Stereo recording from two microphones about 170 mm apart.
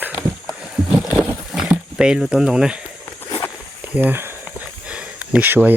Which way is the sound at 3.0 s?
20° left (ahead or behind).